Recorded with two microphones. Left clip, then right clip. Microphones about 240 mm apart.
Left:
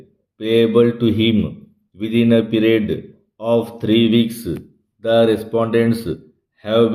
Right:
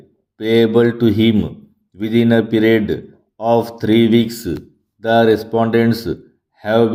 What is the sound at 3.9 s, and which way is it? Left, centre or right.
Speech, right.